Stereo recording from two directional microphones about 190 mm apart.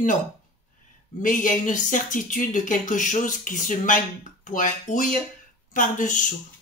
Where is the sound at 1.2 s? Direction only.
45° left (ahead or behind).